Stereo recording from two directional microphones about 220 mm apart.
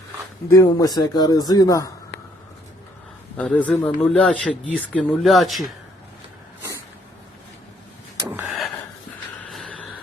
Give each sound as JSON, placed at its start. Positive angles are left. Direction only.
{"t": 0.5, "sound": "speech", "side_deg": 15}
{"t": 3.3, "sound": "speech", "side_deg": 5}
{"t": 8.3, "sound": "a sound", "side_deg": -5}
{"t": 9.5, "sound": "vehicle", "side_deg": 0}